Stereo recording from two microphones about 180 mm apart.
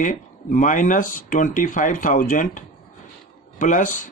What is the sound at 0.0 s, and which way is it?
Speech, 45° left (ahead or behind).